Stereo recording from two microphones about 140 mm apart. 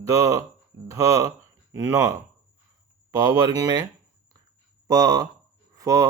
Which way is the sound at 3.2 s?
25° right (ahead or behind).